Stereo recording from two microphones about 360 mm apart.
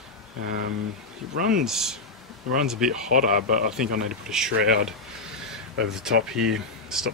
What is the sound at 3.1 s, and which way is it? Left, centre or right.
Speech, right.